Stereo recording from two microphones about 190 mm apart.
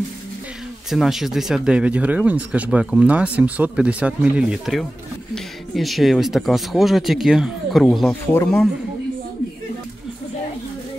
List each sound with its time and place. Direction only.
0.8 s speech: centre (ahead or behind)